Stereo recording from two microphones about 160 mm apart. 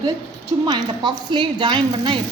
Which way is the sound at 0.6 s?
25° right (ahead or behind).